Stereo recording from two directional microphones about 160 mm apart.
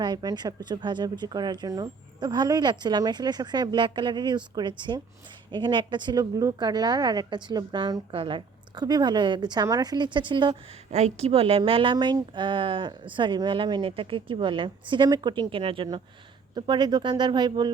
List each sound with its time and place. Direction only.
0.0 s a woman's voice: 25° right (ahead or behind)
10.9 s a woman's voice: 40° right (ahead or behind)